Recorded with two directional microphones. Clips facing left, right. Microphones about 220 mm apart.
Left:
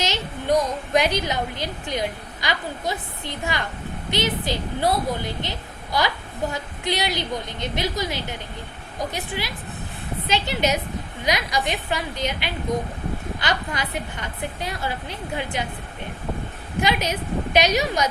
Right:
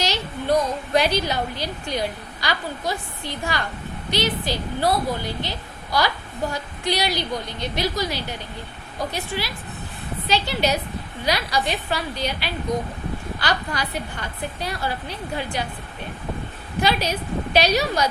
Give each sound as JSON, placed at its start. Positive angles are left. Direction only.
{"t": 0.0, "sound": "a sound", "side_deg": 20}
{"t": 0.9, "sound": "a woman's voice", "side_deg": 15}
{"t": 16.8, "sound": "a woman's voice", "side_deg": 15}